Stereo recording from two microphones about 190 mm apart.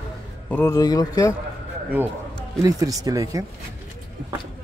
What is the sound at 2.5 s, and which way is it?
Speech, 20° right (ahead or behind).